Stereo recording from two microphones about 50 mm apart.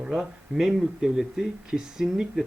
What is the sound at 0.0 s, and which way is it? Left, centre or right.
Speech, centre.